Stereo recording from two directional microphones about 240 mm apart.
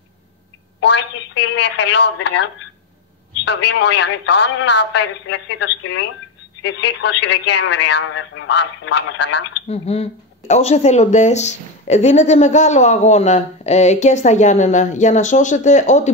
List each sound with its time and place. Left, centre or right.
0.7 s speech: left
3.4 s speech: left
9.7 s speech: left